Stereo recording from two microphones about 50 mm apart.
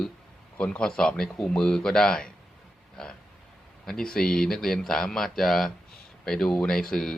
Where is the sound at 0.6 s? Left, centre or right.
Centre.